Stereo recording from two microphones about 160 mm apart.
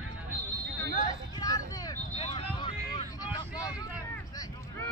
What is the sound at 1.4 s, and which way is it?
Vehicle, 25° left (ahead or behind).